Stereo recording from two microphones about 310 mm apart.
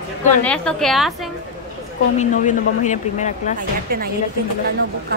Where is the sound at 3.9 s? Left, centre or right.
Right.